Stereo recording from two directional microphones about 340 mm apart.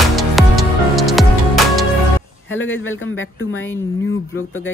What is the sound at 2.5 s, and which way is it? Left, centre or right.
Speech, left.